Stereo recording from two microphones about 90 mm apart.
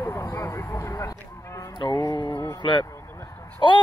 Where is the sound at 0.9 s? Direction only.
35° left (ahead or behind).